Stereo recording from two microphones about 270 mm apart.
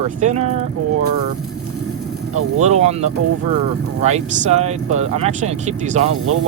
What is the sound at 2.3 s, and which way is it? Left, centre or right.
Speech, right.